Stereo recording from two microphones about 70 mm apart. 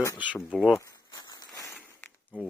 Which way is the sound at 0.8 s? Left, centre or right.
Left.